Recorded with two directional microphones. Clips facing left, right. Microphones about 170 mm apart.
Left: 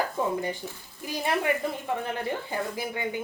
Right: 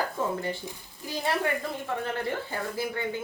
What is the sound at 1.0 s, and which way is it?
A woman's voice, 15° left (ahead or behind).